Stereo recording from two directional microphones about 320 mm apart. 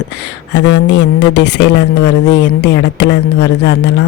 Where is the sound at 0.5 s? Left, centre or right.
Left.